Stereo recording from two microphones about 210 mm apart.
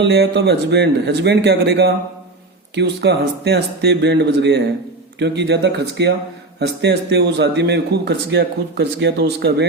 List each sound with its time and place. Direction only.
0.0 s speech: 55° right (ahead or behind)